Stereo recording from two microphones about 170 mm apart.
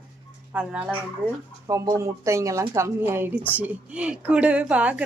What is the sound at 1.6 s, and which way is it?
Speech, 20° right (ahead or behind).